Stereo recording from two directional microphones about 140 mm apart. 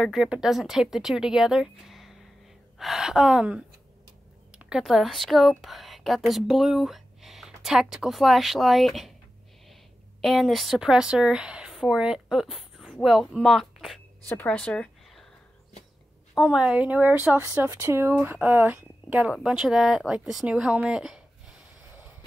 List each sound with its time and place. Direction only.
0.0 s speech: centre (ahead or behind)
10.2 s a woman's voice: centre (ahead or behind)
14.3 s speech: 10° left (ahead or behind)
16.3 s speech: 5° right (ahead or behind)